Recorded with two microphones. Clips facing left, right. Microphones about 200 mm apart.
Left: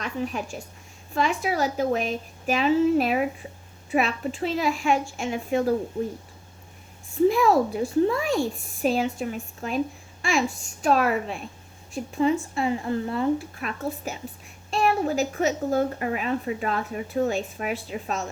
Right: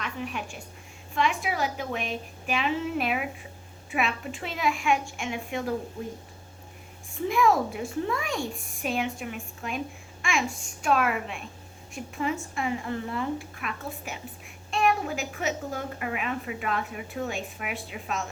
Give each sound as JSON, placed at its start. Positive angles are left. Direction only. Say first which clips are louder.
{"t": 0.0, "sound": "a woman's voice", "louder": "left 5 dB", "side_deg": 35}
{"t": 7.3, "sound": "a woman's voice", "louder": "left 3 dB", "side_deg": 35}